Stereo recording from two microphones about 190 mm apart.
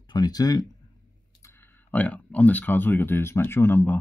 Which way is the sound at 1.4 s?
10° left (ahead or behind).